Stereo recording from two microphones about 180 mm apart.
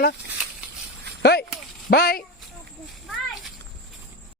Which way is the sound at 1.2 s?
65° left (ahead or behind).